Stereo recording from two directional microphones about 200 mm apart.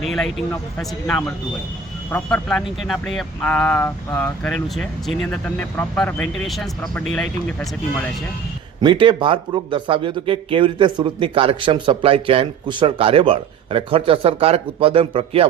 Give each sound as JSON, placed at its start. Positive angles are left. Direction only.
{"t": 0.0, "sound": "speech", "side_deg": 0}
{"t": 8.8, "sound": "speech", "side_deg": -25}